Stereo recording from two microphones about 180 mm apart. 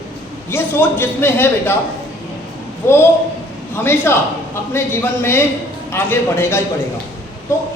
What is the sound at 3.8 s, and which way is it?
A woman's voice, 10° left (ahead or behind).